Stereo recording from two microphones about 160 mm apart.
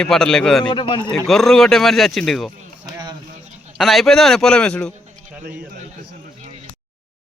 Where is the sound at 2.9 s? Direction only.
25° right (ahead or behind).